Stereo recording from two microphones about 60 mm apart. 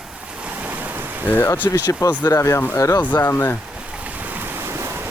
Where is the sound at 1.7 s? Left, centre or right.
Left.